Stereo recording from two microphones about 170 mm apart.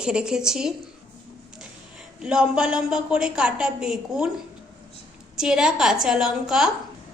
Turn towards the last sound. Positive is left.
turn(degrees=0)  # may be behind; listen again after turning